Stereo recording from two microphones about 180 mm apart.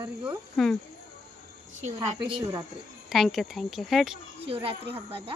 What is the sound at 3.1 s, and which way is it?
Speech, centre (ahead or behind).